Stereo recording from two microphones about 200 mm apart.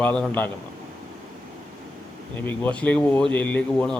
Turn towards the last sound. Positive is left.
turn(degrees=5)  # may be behind; listen again after turning